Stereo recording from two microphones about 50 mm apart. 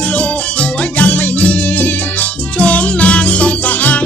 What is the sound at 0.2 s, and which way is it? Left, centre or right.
Music, left.